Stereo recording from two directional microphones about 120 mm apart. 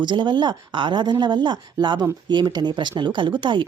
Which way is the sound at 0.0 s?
40° right (ahead or behind).